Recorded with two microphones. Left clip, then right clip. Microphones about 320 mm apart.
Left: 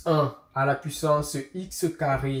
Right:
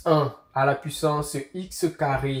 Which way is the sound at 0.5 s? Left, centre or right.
Centre.